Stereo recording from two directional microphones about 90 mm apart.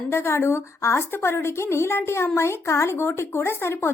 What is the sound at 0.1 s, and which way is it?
A woman's voice, 30° left (ahead or behind).